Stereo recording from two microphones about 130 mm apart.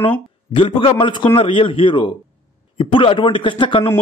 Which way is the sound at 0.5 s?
40° left (ahead or behind).